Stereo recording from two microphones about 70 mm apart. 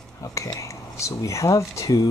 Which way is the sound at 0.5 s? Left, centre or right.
Left.